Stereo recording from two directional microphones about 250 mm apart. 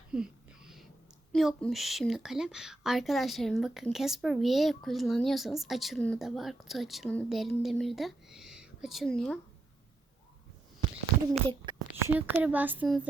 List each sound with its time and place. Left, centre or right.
0.1 s a sound: centre
1.3 s a woman's voice: centre
11.0 s speech: centre
12.1 s speech: centre